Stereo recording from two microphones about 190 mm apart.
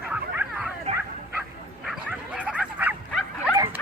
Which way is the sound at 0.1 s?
5° right (ahead or behind).